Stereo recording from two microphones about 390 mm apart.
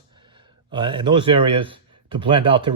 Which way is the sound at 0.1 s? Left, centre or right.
Centre.